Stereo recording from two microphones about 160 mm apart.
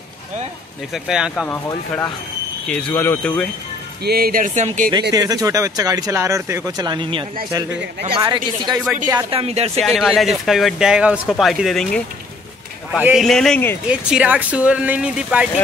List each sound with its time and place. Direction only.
0.9 s speech: 5° right (ahead or behind)
1.7 s speech: 20° left (ahead or behind)
2.7 s speech: 10° left (ahead or behind)
4.0 s speech: 75° right (ahead or behind); by 4.9 s 55° right (ahead or behind)
5.1 s speech: 25° right (ahead or behind)
9.3 s speech: 40° right (ahead or behind)
9.8 s speech: centre (ahead or behind)
13.0 s speech: centre (ahead or behind)
13.8 s speech: 10° right (ahead or behind)